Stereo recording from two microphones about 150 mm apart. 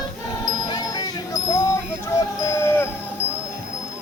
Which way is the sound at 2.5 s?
15° left (ahead or behind).